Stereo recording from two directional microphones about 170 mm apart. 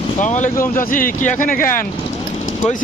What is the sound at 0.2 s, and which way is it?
Speech, 45° left (ahead or behind).